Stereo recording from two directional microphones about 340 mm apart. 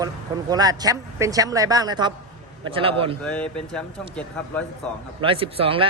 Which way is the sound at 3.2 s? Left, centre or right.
Centre.